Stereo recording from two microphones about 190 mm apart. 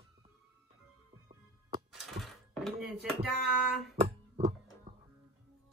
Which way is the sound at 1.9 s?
Centre (ahead or behind).